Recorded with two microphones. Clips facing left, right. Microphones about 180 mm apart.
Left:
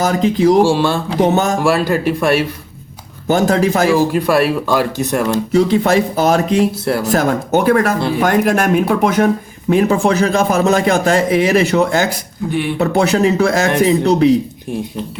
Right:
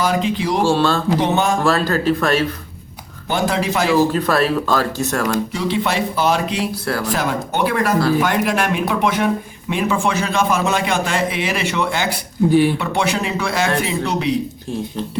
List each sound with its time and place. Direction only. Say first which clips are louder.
0.0 s speech: left 6 dB; 45° left (ahead or behind)
0.6 s speech: left 3 dB; 15° left (ahead or behind)
1.2 s speech: left 8 dB; 45° left (ahead or behind)
1.6 s speech: left 2 dB; 15° left (ahead or behind)
3.2 s speech: left 6 dB; 45° left (ahead or behind)
3.8 s speech: left 3 dB; 10° left (ahead or behind)
5.5 s a man's voice: left 8 dB; 45° left (ahead or behind)
12.5 s speech: right 5 dB; 35° right (ahead or behind)
12.8 s a man's voice: left 7 dB; 40° left (ahead or behind)